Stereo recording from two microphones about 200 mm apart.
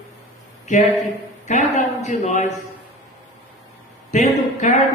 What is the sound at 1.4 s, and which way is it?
Speech, 40° left (ahead or behind).